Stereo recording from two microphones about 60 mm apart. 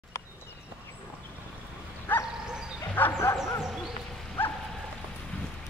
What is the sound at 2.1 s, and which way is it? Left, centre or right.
Bow-wow, left.